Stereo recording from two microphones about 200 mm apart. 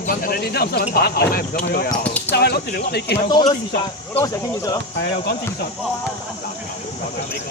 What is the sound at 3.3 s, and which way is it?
Speech, 20° left (ahead or behind).